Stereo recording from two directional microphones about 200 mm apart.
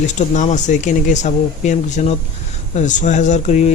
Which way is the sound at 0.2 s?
35° left (ahead or behind).